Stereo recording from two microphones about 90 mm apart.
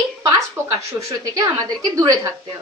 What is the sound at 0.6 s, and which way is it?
Speech, 25° right (ahead or behind).